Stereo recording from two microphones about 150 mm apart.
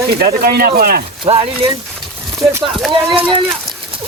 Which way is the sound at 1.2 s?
40° right (ahead or behind).